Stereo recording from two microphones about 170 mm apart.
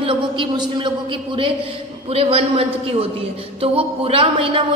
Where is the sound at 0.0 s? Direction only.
30° right (ahead or behind).